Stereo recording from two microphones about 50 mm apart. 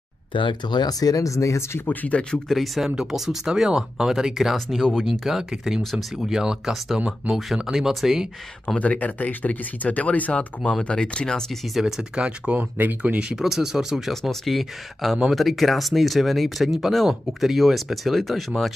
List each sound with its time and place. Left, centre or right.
1.2 s speech: left
1.9 s speech: left
2.4 s speech: centre
6.2 s speech: centre
8.7 s speech: left
10.3 s speech: centre
11.8 s speech: centre
12.5 s speech: right
13.4 s speech: centre